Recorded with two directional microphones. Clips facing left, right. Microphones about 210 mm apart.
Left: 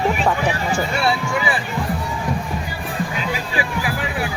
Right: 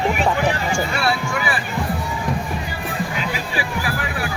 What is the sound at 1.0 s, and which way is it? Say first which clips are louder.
Speech: left 2 dB; 20° left (ahead or behind).